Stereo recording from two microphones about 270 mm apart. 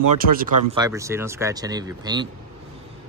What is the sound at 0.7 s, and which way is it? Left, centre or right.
Speech, centre.